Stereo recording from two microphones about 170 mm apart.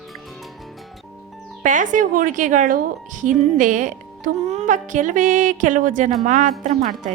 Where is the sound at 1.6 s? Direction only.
50° right (ahead or behind).